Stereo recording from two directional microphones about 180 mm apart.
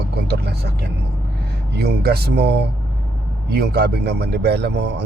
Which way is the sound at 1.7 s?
65° right (ahead or behind).